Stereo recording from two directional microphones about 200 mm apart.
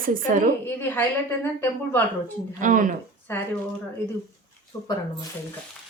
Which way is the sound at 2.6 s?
40° right (ahead or behind).